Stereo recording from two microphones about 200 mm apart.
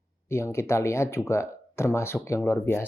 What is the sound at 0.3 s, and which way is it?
Speech, 15° left (ahead or behind).